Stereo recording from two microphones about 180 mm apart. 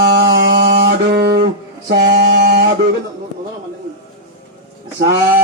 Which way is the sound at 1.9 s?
65° right (ahead or behind).